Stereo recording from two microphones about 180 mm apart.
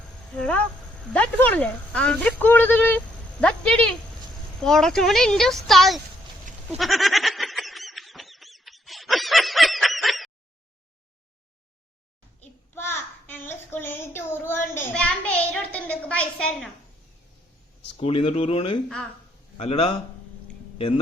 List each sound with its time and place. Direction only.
0.3 s a child's voice: 5° left (ahead or behind)
6.7 s a sound: centre (ahead or behind)
12.4 s child singing: 15° left (ahead or behind)
17.9 s speech: 30° left (ahead or behind)